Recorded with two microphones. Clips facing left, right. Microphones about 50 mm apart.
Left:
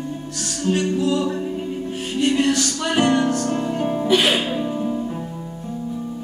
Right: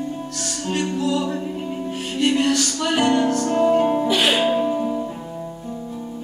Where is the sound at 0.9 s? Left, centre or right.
Left.